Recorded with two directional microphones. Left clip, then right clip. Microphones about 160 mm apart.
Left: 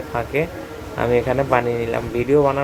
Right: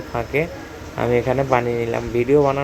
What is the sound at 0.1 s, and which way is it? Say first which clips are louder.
Speech: even; 15° right (ahead or behind).